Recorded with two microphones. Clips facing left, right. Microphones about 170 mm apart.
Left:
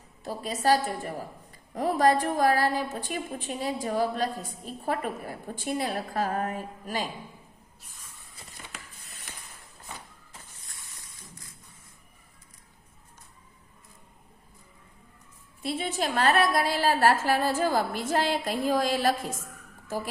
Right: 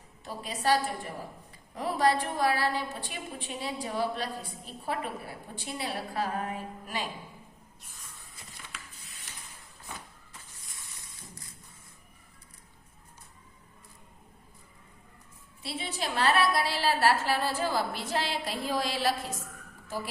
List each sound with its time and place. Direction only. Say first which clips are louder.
0.3 s a woman's voice: left 4 dB; 40° left (ahead or behind)
8.6 s a sound: left 4 dB; 40° left (ahead or behind)
15.6 s a woman's voice: left 6 dB; 50° left (ahead or behind)